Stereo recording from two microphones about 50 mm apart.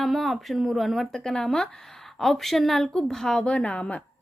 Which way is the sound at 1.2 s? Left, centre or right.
Centre.